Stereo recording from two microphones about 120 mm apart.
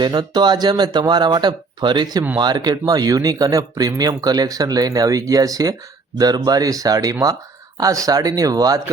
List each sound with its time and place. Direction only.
0.0 s speech: 35° right (ahead or behind)